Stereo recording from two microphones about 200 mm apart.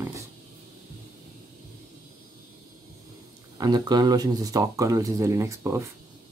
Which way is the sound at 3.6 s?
20° right (ahead or behind).